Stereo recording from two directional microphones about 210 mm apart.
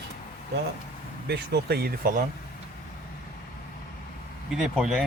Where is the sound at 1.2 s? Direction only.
50° right (ahead or behind).